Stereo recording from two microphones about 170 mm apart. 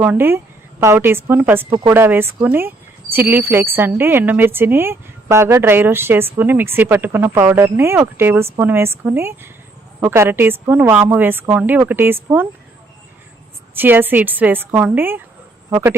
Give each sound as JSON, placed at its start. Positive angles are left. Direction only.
{"t": 0.0, "sound": "a woman's voice", "side_deg": -10}
{"t": 13.7, "sound": "speech", "side_deg": -10}